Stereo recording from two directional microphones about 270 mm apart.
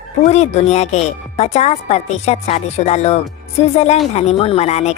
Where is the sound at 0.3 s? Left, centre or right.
Left.